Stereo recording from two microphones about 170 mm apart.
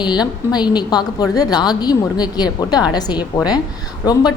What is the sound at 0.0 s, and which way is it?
A woman's voice, 25° left (ahead or behind).